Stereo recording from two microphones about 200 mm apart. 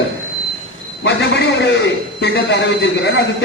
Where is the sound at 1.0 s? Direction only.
55° left (ahead or behind).